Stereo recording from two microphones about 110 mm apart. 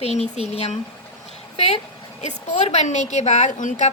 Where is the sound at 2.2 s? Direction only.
90° left.